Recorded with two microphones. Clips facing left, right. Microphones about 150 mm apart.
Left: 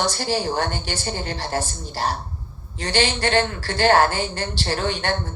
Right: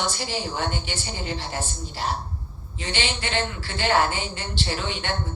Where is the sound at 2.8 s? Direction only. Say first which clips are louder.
Left 7 dB; 40° left (ahead or behind).